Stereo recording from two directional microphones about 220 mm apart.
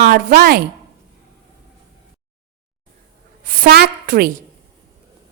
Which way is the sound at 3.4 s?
40° right (ahead or behind).